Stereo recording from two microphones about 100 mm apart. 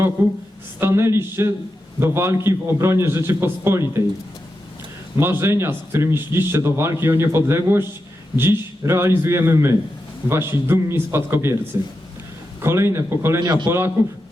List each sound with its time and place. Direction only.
0.2 s a man's voice: 20° right (ahead or behind)
5.2 s a man's voice: 25° right (ahead or behind)
12.6 s a man's voice: 25° right (ahead or behind)
13.4 s a man's voice: 40° right (ahead or behind)
13.7 s a man's voice: 25° right (ahead or behind)